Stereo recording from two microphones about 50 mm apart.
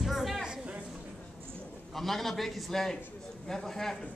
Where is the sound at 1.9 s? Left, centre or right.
Centre.